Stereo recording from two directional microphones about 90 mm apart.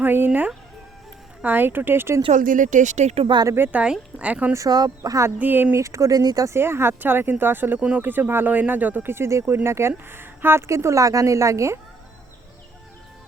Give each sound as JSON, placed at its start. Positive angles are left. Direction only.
{"t": 0.0, "sound": "speech", "side_deg": -25}
{"t": 3.4, "sound": "speech", "side_deg": -25}
{"t": 4.5, "sound": "speech", "side_deg": -45}
{"t": 5.4, "sound": "speech", "side_deg": -20}
{"t": 5.7, "sound": "speech", "side_deg": -35}
{"t": 6.5, "sound": "speech", "side_deg": -25}
{"t": 7.8, "sound": "speech", "side_deg": -10}
{"t": 8.0, "sound": "speech", "side_deg": -20}